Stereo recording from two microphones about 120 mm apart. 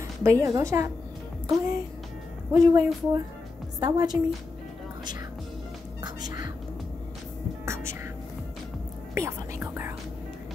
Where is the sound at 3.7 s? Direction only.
35° right (ahead or behind).